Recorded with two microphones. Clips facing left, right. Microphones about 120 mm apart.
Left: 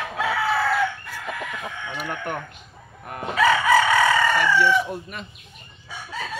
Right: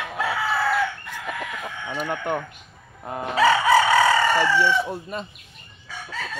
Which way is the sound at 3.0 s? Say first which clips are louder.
Right 1 dB; 25° right (ahead or behind).